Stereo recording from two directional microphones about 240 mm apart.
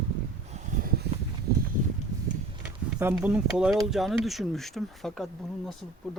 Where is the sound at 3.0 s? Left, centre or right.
Centre.